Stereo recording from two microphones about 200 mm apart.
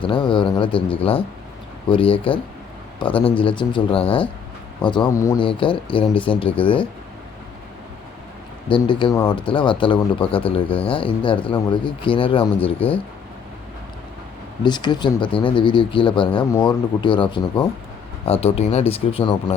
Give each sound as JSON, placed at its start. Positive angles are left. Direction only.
{"t": 0.0, "sound": "speech", "side_deg": 25}
{"t": 8.7, "sound": "speech", "side_deg": 25}
{"t": 14.6, "sound": "speech", "side_deg": 20}